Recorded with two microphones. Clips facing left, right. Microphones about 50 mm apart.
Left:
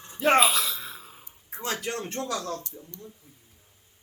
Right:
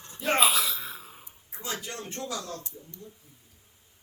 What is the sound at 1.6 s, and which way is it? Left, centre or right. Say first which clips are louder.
Speech: left 5 dB; left.